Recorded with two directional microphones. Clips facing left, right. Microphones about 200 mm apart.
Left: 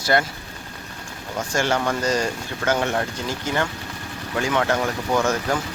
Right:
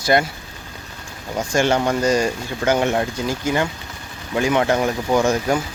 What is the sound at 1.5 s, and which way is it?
Speech, 20° right (ahead or behind).